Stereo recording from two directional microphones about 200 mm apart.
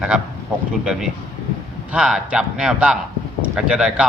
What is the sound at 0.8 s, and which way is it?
A man's voice, 5° right (ahead or behind).